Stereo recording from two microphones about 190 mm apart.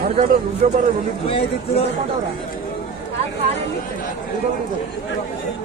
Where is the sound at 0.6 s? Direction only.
45° right (ahead or behind).